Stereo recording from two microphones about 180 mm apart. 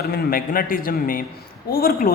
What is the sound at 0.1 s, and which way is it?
A man's voice, 55° left (ahead or behind).